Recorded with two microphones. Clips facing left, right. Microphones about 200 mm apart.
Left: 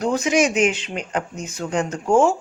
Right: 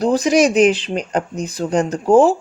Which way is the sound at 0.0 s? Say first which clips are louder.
Right 5 dB; 35° right (ahead or behind).